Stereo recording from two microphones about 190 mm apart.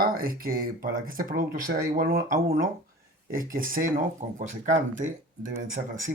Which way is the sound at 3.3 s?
45° right (ahead or behind).